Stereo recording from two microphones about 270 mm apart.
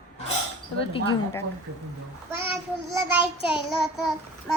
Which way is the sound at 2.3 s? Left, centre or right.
Centre.